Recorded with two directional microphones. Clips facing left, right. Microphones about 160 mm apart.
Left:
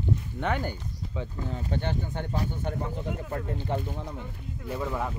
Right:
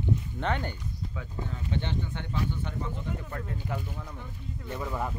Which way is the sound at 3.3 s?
30° left (ahead or behind).